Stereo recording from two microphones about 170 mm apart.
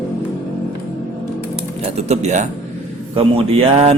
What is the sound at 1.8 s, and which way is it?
Speech, 40° right (ahead or behind).